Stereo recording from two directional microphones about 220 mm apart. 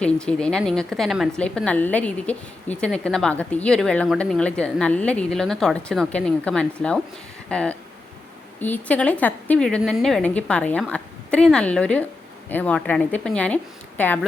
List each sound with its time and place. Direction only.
0.0 s a woman's voice: 5° left (ahead or behind)